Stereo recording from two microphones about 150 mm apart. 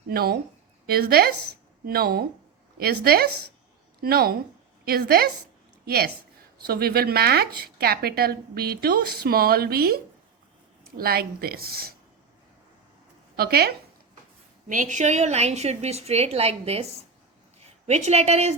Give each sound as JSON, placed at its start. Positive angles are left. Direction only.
{"t": 0.1, "sound": "a woman's voice", "side_deg": -90}
{"t": 13.3, "sound": "speech", "side_deg": -90}
{"t": 14.7, "sound": "a woman's voice", "side_deg": -55}